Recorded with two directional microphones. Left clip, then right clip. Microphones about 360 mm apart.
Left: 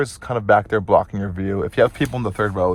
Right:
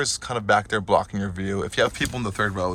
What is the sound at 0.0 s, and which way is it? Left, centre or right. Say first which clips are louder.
Speech: left 3 dB; centre.